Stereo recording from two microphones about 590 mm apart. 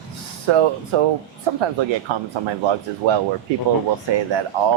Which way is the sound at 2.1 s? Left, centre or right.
Right.